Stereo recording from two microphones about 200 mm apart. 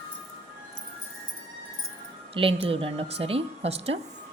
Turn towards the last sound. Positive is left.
turn(degrees=-30)  # may be behind; listen again after turning